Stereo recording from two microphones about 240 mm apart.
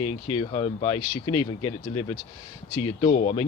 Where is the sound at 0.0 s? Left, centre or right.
Left.